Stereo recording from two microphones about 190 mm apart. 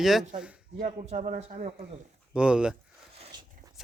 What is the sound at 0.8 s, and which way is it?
Speech, 35° right (ahead or behind).